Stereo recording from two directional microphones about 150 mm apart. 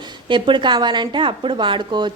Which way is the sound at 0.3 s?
30° right (ahead or behind).